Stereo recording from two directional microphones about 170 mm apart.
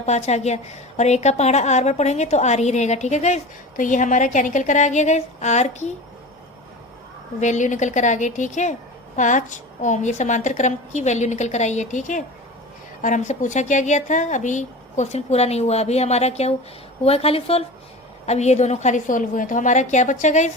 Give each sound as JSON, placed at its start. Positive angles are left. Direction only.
{"t": 0.0, "sound": "a woman's voice", "side_deg": 40}
{"t": 7.3, "sound": "a woman's voice", "side_deg": 45}